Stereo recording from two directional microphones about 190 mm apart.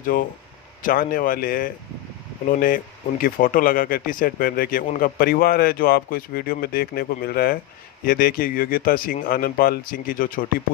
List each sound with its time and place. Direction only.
0.1 s speech: 45° left (ahead or behind)